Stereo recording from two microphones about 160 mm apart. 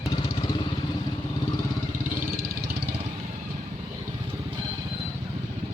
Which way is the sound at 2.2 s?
70° right (ahead or behind).